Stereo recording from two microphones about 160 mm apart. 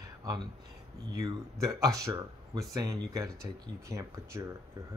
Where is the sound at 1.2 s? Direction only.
20° right (ahead or behind).